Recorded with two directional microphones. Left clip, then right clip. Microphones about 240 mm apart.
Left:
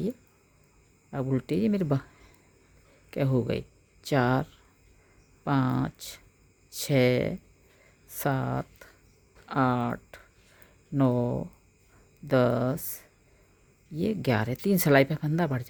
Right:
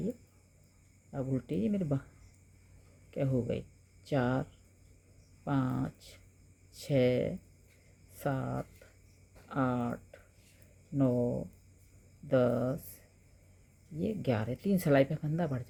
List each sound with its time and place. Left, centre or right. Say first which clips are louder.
1.1 s speech: left 7 dB; left
3.1 s speech: left 5 dB; left
5.5 s speech: left 7 dB; left
12.3 s speech: left 4 dB; left